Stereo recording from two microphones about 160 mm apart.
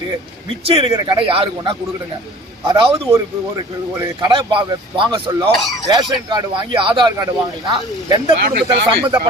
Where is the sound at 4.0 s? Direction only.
25° right (ahead or behind).